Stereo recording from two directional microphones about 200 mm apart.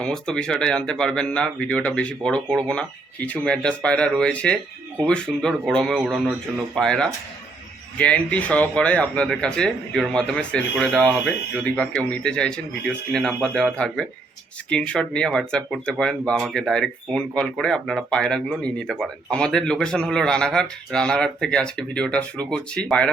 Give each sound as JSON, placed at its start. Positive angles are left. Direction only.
{"t": 0.0, "sound": "speech", "side_deg": 5}